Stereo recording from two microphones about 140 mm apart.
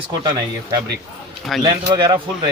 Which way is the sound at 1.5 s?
Centre (ahead or behind).